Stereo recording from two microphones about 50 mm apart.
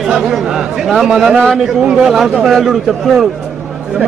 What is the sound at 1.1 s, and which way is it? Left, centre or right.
A man's voice, centre.